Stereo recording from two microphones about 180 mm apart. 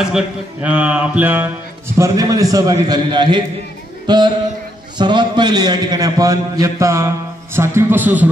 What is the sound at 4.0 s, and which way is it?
Music, 25° right (ahead or behind).